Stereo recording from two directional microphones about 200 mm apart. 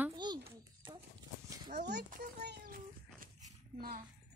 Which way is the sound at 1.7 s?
55° right (ahead or behind).